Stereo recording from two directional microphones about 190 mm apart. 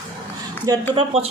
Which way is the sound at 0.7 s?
20° right (ahead or behind).